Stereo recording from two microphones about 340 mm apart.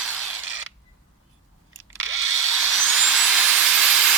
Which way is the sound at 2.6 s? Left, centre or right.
Centre.